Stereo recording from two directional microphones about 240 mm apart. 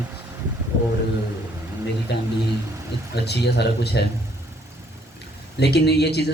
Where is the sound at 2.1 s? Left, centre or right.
Left.